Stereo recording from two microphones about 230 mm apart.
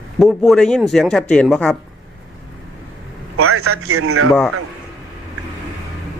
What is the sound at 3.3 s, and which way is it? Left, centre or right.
Speech, right.